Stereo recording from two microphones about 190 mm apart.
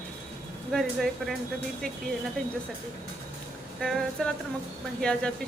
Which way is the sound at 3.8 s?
Centre (ahead or behind).